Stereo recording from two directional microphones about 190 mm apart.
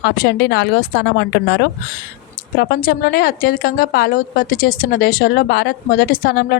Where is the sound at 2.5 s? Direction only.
50° left (ahead or behind).